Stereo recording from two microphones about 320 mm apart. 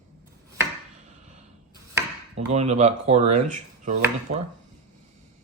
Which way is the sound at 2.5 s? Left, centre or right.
Right.